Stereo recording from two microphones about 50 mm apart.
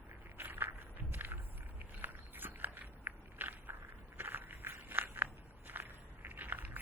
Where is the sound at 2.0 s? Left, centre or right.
Right.